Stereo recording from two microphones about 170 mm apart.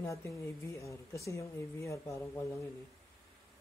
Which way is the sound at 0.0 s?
15° left (ahead or behind).